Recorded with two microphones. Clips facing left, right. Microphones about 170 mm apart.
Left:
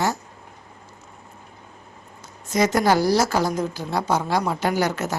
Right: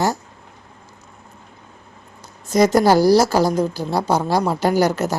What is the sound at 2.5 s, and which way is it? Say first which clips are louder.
A woman's voice: right 5 dB; 35° right (ahead or behind).